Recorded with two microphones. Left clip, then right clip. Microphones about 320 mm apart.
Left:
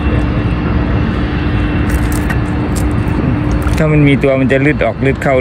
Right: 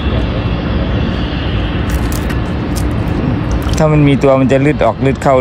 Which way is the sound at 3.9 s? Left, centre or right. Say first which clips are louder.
Even; right.